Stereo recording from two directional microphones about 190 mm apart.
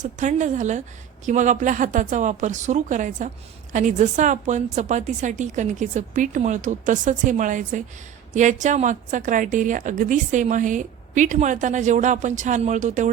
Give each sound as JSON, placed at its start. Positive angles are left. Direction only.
{"t": 0.0, "sound": "a woman's voice", "side_deg": -40}